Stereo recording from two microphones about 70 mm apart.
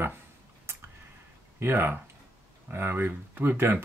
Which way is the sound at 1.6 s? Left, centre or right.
Right.